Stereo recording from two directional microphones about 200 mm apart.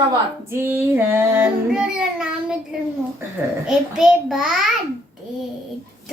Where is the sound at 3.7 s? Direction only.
5° right (ahead or behind).